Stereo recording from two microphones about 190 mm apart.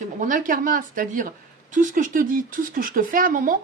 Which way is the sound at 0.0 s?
45° right (ahead or behind).